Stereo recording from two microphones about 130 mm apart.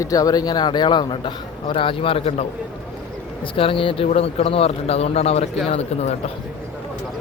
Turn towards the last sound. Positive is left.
turn(degrees=55)  # may be behind; listen again after turning